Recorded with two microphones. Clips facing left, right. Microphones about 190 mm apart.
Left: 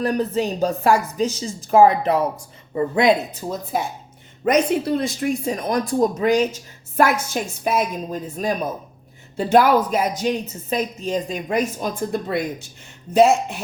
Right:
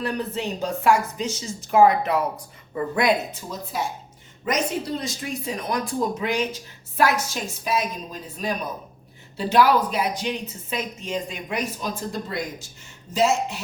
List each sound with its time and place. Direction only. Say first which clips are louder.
0.0 s a woman's voice: left 6 dB; 40° left (ahead or behind); by 3.1 s 25° left (ahead or behind)
4.4 s speech: left 7 dB; 60° left (ahead or behind)